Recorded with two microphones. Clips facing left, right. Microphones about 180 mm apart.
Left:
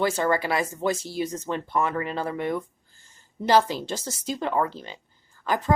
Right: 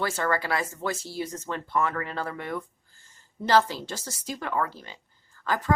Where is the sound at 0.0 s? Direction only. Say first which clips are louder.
Left 4 dB; 20° left (ahead or behind).